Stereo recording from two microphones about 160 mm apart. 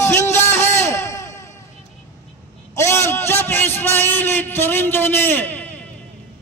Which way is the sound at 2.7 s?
15° left (ahead or behind).